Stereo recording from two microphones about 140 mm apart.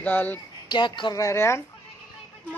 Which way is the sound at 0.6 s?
35° left (ahead or behind).